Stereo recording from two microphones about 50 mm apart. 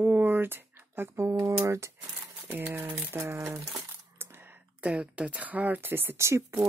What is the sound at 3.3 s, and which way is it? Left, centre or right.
Speech, right.